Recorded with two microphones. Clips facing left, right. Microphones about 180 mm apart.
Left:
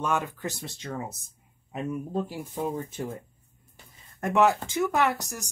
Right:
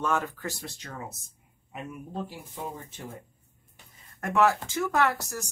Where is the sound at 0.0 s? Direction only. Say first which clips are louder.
Left 1 dB; 15° left (ahead or behind).